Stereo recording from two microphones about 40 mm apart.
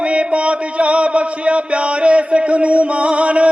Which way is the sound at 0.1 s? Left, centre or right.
Right.